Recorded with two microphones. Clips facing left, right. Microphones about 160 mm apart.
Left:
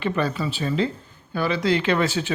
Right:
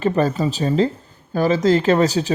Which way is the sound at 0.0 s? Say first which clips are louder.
Right 6 dB; 40° right (ahead or behind).